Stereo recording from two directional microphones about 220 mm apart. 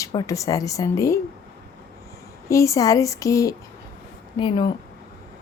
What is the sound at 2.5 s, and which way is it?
A woman's voice, 15° left (ahead or behind).